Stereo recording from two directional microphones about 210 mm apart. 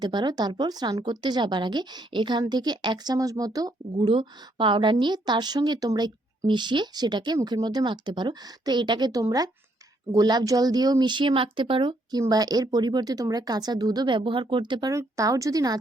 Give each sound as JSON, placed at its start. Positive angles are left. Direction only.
{"t": 0.0, "sound": "speech", "side_deg": -20}